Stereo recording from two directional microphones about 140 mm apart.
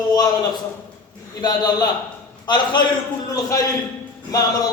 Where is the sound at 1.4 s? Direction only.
30° left (ahead or behind).